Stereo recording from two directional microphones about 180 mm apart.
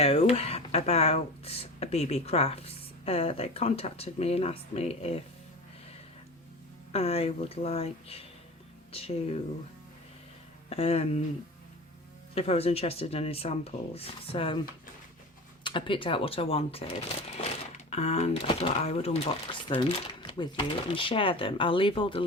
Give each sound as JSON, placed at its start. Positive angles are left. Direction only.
{"t": 0.0, "sound": "speech", "side_deg": 35}
{"t": 6.9, "sound": "speech", "side_deg": 35}
{"t": 10.7, "sound": "speech", "side_deg": 35}
{"t": 12.3, "sound": "speech", "side_deg": 35}
{"t": 15.6, "sound": "speech", "side_deg": 30}
{"t": 17.9, "sound": "speech", "side_deg": 35}